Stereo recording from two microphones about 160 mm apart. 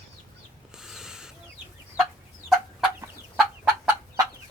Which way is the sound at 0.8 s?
5° right (ahead or behind).